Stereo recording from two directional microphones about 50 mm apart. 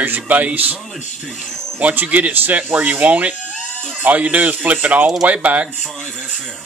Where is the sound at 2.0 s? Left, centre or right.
Right.